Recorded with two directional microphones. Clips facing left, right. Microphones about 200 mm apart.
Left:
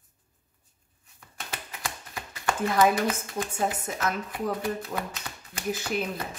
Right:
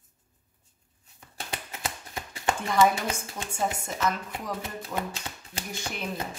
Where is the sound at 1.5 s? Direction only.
20° right (ahead or behind).